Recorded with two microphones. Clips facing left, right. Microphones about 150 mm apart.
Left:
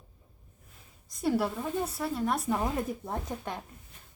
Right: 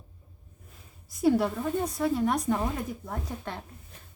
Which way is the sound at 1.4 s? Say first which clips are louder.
Right 3 dB; 5° left (ahead or behind).